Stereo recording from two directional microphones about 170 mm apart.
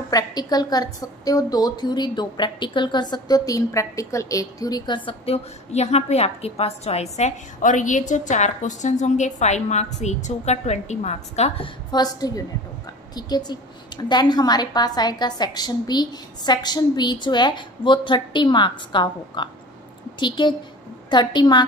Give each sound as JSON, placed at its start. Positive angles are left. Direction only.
{"t": 0.1, "sound": "a woman's voice", "side_deg": 25}